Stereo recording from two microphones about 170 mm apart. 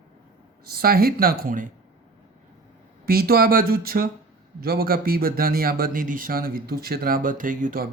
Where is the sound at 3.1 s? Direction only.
60° right (ahead or behind).